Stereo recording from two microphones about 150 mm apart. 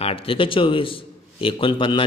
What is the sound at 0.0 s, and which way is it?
Speech, 40° left (ahead or behind).